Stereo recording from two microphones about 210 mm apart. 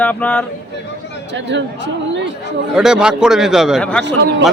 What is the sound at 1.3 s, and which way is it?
Speech, 60° right (ahead or behind).